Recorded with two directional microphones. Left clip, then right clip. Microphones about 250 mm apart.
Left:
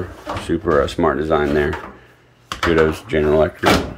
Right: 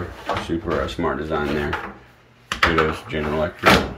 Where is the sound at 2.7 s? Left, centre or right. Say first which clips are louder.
Left 5 dB; left.